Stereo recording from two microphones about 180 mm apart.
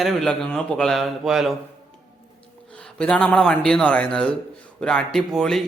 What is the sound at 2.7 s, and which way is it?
Speech, 5° left (ahead or behind).